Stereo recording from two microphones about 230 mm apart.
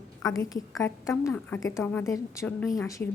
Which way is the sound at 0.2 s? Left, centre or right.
Centre.